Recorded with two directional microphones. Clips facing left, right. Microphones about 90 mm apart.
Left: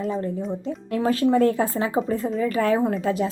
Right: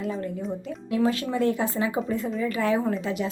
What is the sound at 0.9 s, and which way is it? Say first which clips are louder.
A woman's voice: left 5 dB; 40° left (ahead or behind).